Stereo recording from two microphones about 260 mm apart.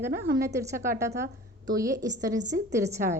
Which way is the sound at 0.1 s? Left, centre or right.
Right.